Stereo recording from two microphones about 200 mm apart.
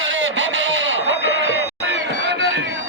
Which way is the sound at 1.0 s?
55° left (ahead or behind).